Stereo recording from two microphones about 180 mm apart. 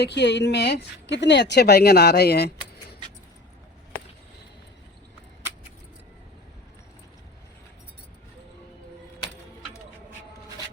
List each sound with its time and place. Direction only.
0.0 s speech: 70° left (ahead or behind)